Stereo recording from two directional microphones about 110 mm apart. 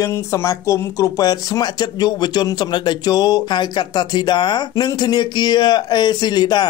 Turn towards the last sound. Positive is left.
turn(degrees=40)  # may be behind; listen again after turning